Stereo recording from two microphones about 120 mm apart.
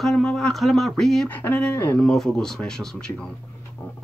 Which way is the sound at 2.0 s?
5° left (ahead or behind).